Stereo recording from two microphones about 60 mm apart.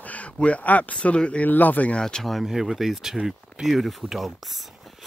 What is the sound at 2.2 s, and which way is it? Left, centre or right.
Speech, centre.